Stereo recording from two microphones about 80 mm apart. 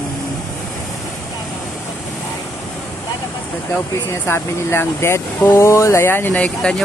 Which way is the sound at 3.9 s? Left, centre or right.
Left.